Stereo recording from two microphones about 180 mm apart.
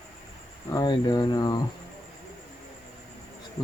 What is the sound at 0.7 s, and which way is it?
Speech, 25° left (ahead or behind).